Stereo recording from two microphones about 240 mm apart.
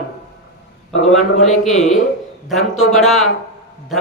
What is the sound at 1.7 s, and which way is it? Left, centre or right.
Speech, left.